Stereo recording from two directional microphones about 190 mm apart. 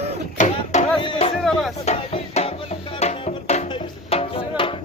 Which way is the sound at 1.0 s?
30° left (ahead or behind).